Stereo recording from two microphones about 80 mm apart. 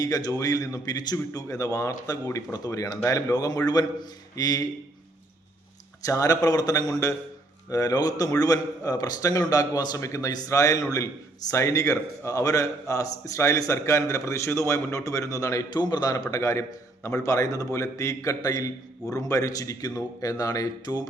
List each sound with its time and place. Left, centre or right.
0.0 s a man's voice: left
6.1 s a man's voice: left
15.7 s a man's voice: left